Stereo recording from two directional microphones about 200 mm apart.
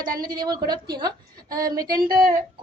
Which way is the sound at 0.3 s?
20° right (ahead or behind).